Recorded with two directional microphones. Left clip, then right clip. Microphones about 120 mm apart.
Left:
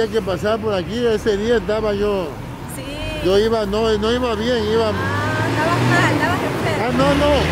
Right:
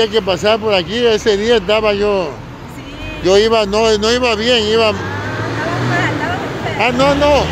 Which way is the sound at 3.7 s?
20° right (ahead or behind).